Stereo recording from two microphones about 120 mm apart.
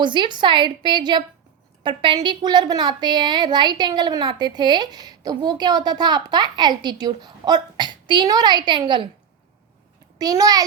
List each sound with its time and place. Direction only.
0.0 s a woman's voice: 40° right (ahead or behind)
10.2 s a child's voice: 30° right (ahead or behind)